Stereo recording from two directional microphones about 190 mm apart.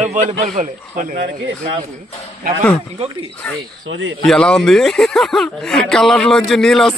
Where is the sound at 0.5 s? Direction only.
45° right (ahead or behind).